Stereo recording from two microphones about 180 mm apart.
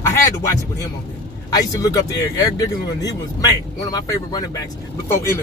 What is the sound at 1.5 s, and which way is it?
Speech, 20° left (ahead or behind).